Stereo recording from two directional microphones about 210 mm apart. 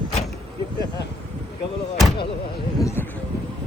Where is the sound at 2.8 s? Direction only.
15° left (ahead or behind).